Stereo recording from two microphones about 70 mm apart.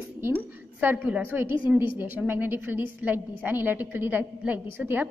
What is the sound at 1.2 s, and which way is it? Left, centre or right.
A woman's voice, right.